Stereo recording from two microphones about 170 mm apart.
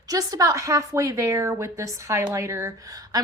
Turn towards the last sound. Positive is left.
turn(degrees=-20)  # may be behind; listen again after turning